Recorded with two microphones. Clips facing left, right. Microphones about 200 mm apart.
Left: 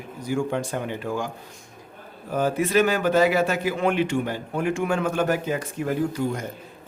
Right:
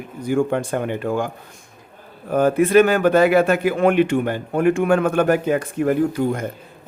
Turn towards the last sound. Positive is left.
turn(degrees=-55)  # may be behind; listen again after turning